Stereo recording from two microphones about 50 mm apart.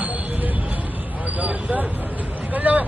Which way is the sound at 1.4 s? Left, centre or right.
Right.